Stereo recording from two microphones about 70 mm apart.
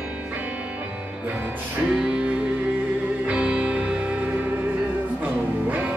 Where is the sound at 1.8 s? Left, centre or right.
Centre.